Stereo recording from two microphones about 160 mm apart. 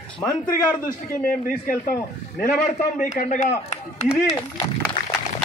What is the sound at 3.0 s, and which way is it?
Speech, 50° left (ahead or behind).